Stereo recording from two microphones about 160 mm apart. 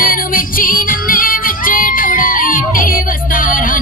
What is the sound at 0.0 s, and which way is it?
Music, 60° left (ahead or behind).